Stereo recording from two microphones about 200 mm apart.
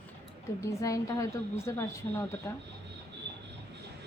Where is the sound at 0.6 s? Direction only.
15° left (ahead or behind).